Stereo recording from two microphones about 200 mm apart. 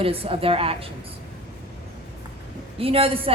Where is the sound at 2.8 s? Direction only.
30° right (ahead or behind).